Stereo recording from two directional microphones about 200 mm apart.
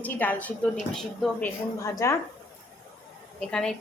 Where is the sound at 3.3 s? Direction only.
5° left (ahead or behind).